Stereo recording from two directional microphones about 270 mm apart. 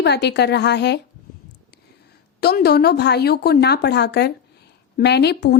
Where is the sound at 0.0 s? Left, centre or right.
Left.